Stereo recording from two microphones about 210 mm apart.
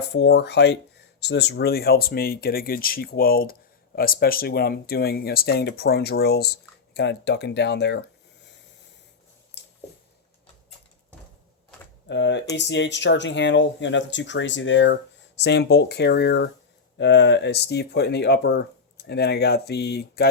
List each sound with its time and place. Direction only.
0.1 s speech: 55° left (ahead or behind)
9.6 s a sound: 55° left (ahead or behind)
12.0 s speech: 55° left (ahead or behind)